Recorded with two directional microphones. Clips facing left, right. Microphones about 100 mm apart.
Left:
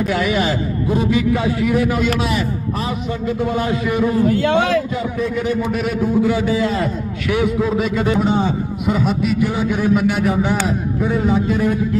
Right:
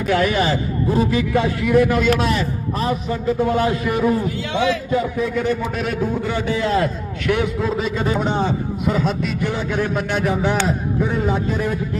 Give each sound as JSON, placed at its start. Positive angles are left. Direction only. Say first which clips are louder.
{"t": 0.1, "sound": "a man's voice", "louder": "right 5 dB", "side_deg": 5}
{"t": 3.4, "sound": "a man's voice", "louder": "left 1 dB", "side_deg": 0}
{"t": 4.3, "sound": "a man's voice", "louder": "left 5 dB", "side_deg": 50}
{"t": 5.2, "sound": "a man's voice", "louder": "left 1 dB", "side_deg": 5}